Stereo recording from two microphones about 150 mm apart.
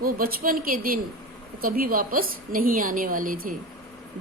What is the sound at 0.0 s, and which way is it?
A woman's voice, 75° right (ahead or behind).